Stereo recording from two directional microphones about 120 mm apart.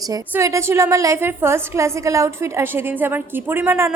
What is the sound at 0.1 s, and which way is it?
A woman's voice, 25° right (ahead or behind).